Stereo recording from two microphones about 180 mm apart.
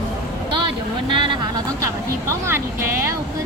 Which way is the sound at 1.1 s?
25° right (ahead or behind).